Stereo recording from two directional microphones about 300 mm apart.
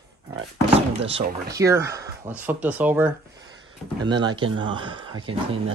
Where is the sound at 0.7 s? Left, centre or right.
Centre.